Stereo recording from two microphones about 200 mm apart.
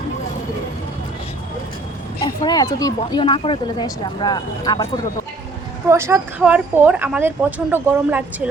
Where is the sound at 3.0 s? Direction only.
25° left (ahead or behind).